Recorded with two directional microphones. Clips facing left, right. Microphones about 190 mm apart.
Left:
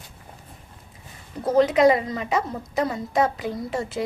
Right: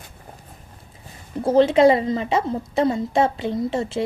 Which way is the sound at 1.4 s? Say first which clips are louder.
Right 3 dB; 30° right (ahead or behind).